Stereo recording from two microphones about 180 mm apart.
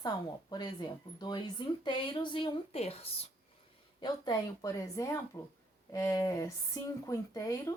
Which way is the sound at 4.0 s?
25° left (ahead or behind).